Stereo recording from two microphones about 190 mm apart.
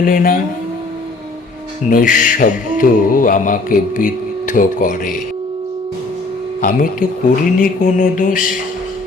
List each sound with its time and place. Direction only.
0.0 s music: 50° left (ahead or behind)
1.9 s music: 45° left (ahead or behind)
6.6 s speech: 45° left (ahead or behind)
7.6 s music: 45° left (ahead or behind)